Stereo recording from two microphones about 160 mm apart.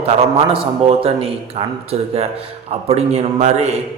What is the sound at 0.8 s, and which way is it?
A man's voice, 35° right (ahead or behind).